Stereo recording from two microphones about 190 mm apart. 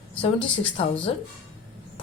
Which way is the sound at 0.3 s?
5° left (ahead or behind).